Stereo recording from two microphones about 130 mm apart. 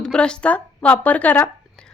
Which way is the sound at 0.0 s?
5° left (ahead or behind).